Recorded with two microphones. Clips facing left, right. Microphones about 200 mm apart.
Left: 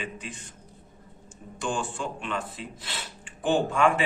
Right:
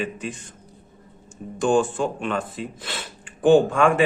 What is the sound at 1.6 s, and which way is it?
A man's voice, 45° right (ahead or behind).